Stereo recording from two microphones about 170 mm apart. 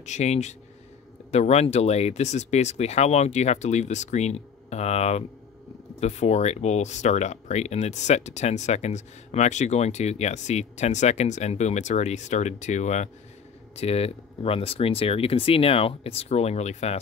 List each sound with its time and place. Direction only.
0.0 s speech: 40° left (ahead or behind)